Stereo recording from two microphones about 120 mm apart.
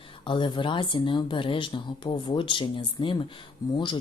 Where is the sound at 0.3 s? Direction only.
40° left (ahead or behind).